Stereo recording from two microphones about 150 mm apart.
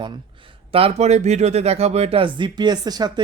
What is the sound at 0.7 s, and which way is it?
Speech, 40° right (ahead or behind).